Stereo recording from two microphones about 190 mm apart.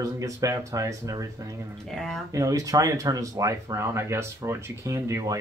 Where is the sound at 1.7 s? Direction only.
Centre (ahead or behind).